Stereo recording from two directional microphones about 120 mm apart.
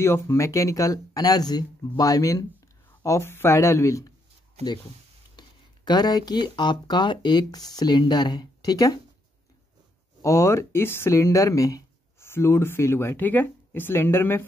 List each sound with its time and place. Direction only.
0.0 s speech: 20° left (ahead or behind)
4.6 s speech: 65° right (ahead or behind)
5.4 s a sound: 35° left (ahead or behind)
5.9 s speech: 35° left (ahead or behind)
10.2 s speech: 25° left (ahead or behind)